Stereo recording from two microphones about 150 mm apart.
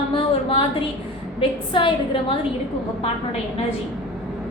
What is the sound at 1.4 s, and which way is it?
Speech, 35° left (ahead or behind).